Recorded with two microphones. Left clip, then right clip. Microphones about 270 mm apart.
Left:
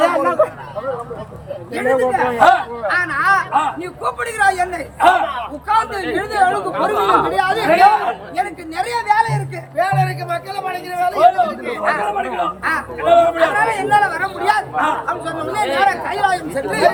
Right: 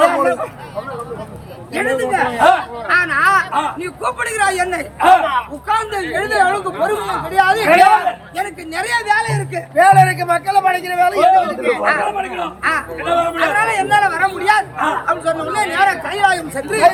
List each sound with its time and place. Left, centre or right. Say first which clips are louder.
0.1 s a sound: left 1 dB; centre
1.7 s a man's voice: left 1 dB; centre
6.7 s speech: left 4 dB; left
7.3 s a man's voice: right 3 dB; centre